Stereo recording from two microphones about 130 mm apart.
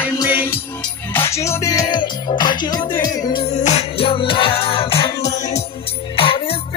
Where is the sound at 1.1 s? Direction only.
20° left (ahead or behind).